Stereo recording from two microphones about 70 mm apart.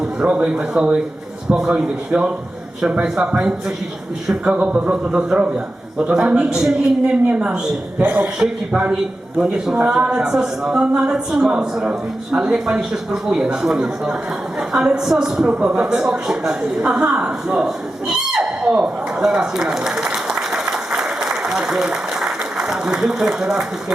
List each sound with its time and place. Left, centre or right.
0.2 s a woman's voice: centre
8.4 s a woman's voice: centre
18.3 s a sound: centre